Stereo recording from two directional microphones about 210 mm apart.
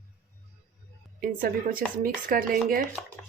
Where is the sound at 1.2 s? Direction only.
40° right (ahead or behind).